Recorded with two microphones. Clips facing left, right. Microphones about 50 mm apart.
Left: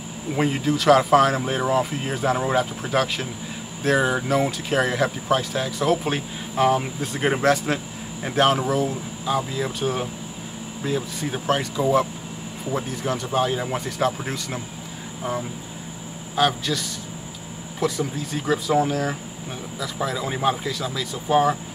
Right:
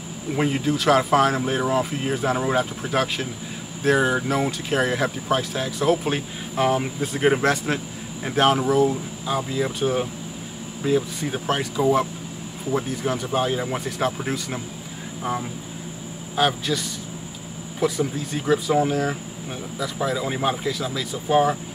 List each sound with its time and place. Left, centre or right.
0.3 s speech: centre
16.3 s speech: centre